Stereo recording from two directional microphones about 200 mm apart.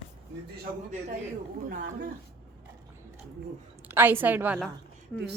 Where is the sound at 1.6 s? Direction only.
45° right (ahead or behind).